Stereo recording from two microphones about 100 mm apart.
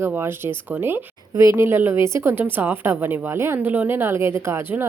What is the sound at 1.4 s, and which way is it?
A woman's voice, 30° right (ahead or behind).